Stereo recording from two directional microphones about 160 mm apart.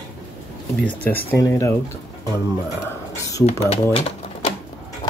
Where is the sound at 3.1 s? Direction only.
20° left (ahead or behind).